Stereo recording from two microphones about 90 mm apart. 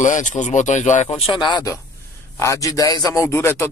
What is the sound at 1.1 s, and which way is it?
Speech, 75° left (ahead or behind).